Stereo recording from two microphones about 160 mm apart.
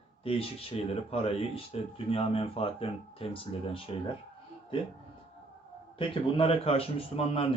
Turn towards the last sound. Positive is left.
turn(degrees=35)  # may be behind; listen again after turning